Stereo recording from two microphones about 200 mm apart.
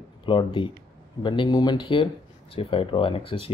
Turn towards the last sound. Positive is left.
turn(degrees=25)  # may be behind; listen again after turning